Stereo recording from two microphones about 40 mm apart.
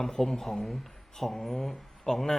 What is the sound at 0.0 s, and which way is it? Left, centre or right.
Speech, centre.